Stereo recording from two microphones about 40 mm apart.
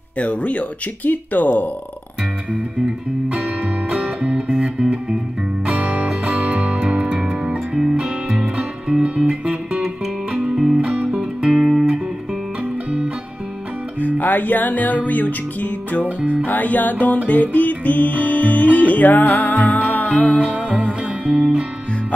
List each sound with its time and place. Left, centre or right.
0.2 s speech: left
4.0 s music: right
4.6 s music: centre
5.7 s music: right
6.8 s music: right
9.0 s music: right
10.8 s music: right
11.4 s guitar: centre
14.0 s music: left
20.1 s music: left
20.3 s music: right
21.3 s music: right